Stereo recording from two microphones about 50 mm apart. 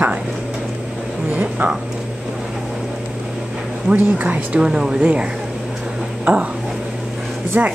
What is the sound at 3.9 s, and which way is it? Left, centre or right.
Speech, right.